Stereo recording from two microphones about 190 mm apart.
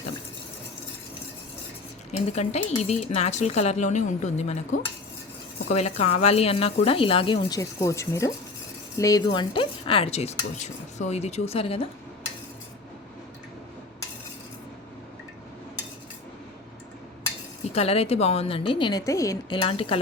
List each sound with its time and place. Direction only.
2.1 s speech: 35° left (ahead or behind)
5.7 s speech: 35° left (ahead or behind)
17.7 s speech: 30° left (ahead or behind); by 19.5 s 15° left (ahead or behind)
19.5 s speech: 30° left (ahead or behind)